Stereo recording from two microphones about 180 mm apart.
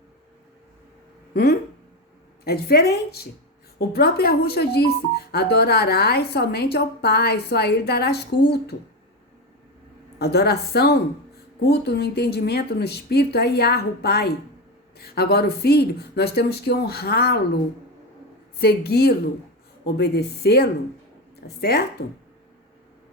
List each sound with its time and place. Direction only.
1.3 s speech: 60° left (ahead or behind)
10.2 s speech: 60° left (ahead or behind)
18.6 s speech: 60° left (ahead or behind)